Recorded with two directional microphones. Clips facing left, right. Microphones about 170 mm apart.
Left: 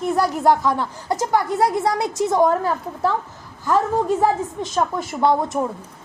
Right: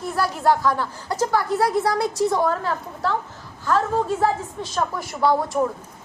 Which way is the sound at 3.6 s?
15° left (ahead or behind).